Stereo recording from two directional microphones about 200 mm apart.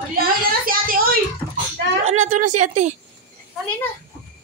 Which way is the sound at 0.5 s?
45° right (ahead or behind).